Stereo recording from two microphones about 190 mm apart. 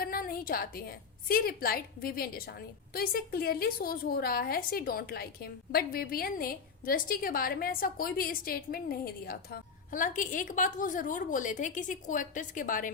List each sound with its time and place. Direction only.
0.0 s a woman's voice: 50° left (ahead or behind)